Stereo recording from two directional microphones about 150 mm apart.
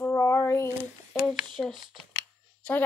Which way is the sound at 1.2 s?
Centre (ahead or behind).